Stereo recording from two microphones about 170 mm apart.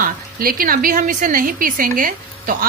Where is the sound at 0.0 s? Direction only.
60° right (ahead or behind).